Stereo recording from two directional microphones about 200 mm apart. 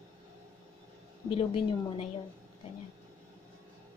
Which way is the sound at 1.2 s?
30° left (ahead or behind).